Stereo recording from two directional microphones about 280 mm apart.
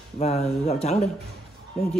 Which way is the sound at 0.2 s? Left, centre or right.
Left.